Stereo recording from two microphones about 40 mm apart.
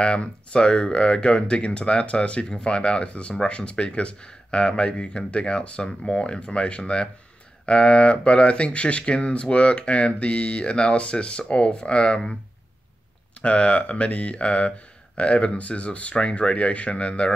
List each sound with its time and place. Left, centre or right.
0.0 s speech: left
13.4 s speech: left